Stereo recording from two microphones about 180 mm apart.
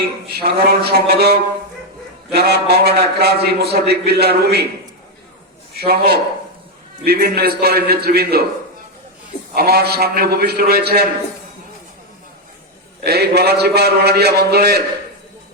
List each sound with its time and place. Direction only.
0.3 s a man's voice: 65° right (ahead or behind)
5.7 s a man's voice: 60° right (ahead or behind)
9.6 s a man's voice: 60° right (ahead or behind)
13.1 s a man's voice: 65° right (ahead or behind)